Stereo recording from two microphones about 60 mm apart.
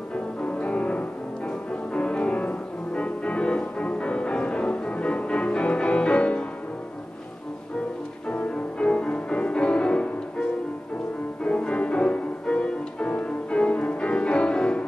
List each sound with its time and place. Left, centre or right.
0.1 s music: left
8.3 s music: left